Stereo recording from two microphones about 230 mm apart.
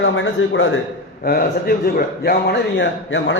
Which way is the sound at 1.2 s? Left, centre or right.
Left.